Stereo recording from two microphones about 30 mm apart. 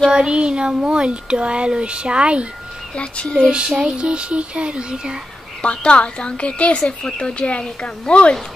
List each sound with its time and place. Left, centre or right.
0.1 s speech: right
3.0 s a woman's voice: left
3.4 s speech: right
5.6 s a woman's voice: left